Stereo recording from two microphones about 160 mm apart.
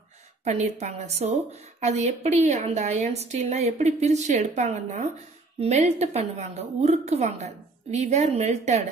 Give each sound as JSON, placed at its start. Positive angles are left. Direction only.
{"t": 0.4, "sound": "a woman's voice", "side_deg": -45}